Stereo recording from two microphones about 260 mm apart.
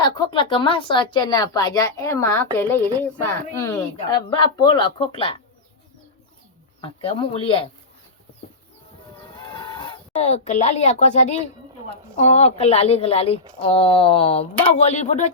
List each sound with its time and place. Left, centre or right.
0.0 s speech: centre
7.1 s speech: left
9.6 s speech: centre